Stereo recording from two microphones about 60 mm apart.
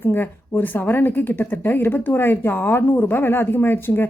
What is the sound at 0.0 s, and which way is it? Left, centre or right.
A woman's voice, left.